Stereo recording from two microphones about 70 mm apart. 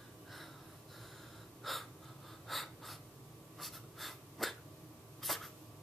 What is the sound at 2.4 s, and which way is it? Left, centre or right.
Breathing, centre.